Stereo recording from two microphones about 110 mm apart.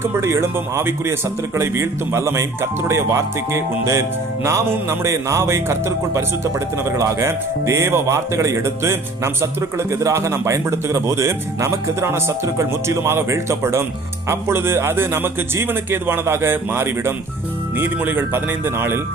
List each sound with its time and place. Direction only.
0.0 s a man's voice: 25° right (ahead or behind)